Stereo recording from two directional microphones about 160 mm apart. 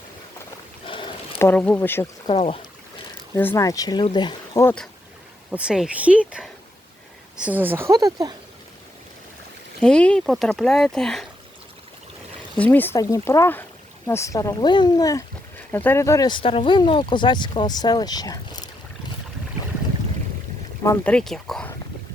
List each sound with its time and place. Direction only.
0.9 s a sound: 30° left (ahead or behind)
1.4 s speech: 10° left (ahead or behind)
2.2 s speech: 40° left (ahead or behind)
3.3 s speech: 15° left (ahead or behind)
5.5 s speech: 5° right (ahead or behind); by 8.4 s 25° right (ahead or behind)
9.8 s speech: 5° left (ahead or behind)
12.5 s speech: 10° left (ahead or behind)
15.5 s speech: 10° left (ahead or behind)
20.8 s speech: 10° left (ahead or behind)